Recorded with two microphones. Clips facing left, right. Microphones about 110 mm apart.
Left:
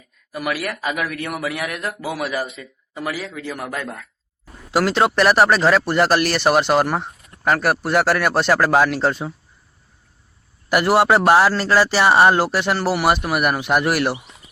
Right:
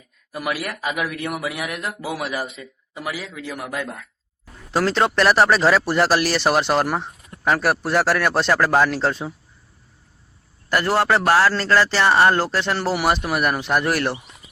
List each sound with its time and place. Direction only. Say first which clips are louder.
0.3 s speech: left 2 dB; 20° right (ahead or behind)
4.7 s speech: left 2 dB; 5° left (ahead or behind)
10.7 s a man's voice: left 3 dB; 15° left (ahead or behind)